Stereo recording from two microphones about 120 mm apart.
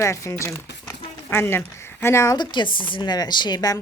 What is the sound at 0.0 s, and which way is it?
A woman's voice, 25° left (ahead or behind).